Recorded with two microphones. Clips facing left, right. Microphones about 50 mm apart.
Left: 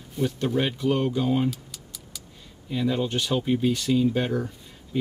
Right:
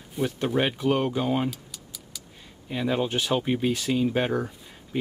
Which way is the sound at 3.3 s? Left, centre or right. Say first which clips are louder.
Left 2 dB; right.